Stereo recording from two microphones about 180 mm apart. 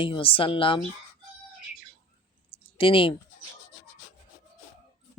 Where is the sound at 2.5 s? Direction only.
30° left (ahead or behind).